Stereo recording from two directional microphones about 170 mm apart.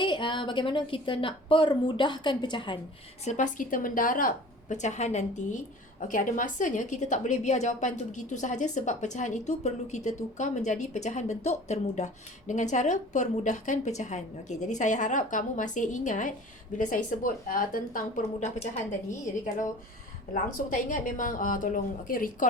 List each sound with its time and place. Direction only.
0.0 s a woman's voice: 30° left (ahead or behind)
3.2 s a woman's voice: 45° left (ahead or behind)
20.3 s a woman's voice: 55° left (ahead or behind)